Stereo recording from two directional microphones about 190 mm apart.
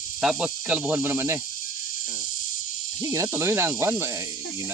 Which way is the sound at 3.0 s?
20° right (ahead or behind).